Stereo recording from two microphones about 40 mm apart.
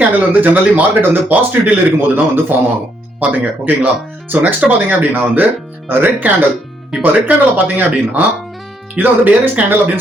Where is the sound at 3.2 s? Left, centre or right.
Right.